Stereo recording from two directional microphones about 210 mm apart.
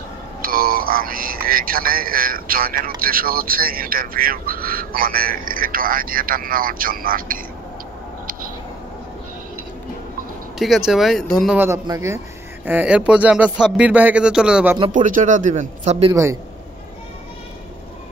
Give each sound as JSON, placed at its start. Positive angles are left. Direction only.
{"t": 0.4, "sound": "music", "side_deg": -45}
{"t": 3.0, "sound": "speech", "side_deg": -45}
{"t": 10.9, "sound": "speech", "side_deg": 0}
{"t": 11.5, "sound": "a man's voice", "side_deg": -10}
{"t": 14.9, "sound": "speech", "side_deg": -40}
{"t": 16.1, "sound": "a man's voice", "side_deg": -15}